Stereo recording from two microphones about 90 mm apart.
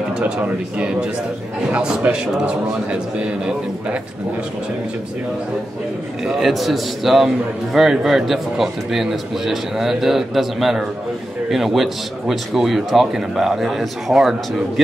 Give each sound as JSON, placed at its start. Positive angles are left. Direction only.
{"t": 0.2, "sound": "a man's voice", "side_deg": -15}
{"t": 6.2, "sound": "a man's voice", "side_deg": -5}